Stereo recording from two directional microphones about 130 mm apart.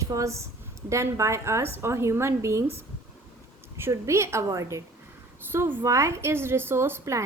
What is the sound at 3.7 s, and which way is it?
A woman's voice, 20° right (ahead or behind).